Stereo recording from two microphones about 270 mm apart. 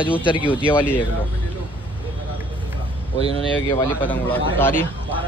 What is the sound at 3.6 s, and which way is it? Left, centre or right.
Speech, centre.